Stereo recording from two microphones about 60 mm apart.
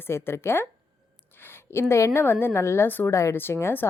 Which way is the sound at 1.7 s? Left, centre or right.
Left.